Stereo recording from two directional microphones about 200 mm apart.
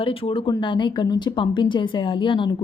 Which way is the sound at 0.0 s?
25° left (ahead or behind).